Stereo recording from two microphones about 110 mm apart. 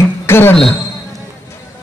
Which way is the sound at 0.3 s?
20° left (ahead or behind).